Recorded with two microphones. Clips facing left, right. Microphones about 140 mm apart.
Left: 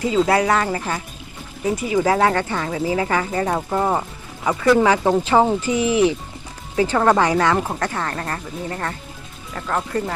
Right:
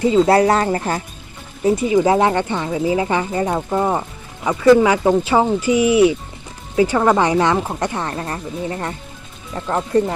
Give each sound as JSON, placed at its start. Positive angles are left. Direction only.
{"t": 0.0, "sound": "speech", "side_deg": -30}
{"t": 1.6, "sound": "speech", "side_deg": -25}
{"t": 3.4, "sound": "speech", "side_deg": -5}
{"t": 5.0, "sound": "speech", "side_deg": -5}
{"t": 7.2, "sound": "speech", "side_deg": -20}
{"t": 7.5, "sound": "speech", "side_deg": -5}
{"t": 7.8, "sound": "speech", "side_deg": -20}